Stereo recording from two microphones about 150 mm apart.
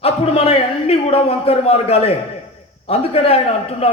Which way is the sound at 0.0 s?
40° left (ahead or behind).